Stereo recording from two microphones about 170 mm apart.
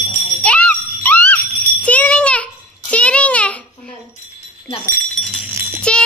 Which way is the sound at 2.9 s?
5° left (ahead or behind).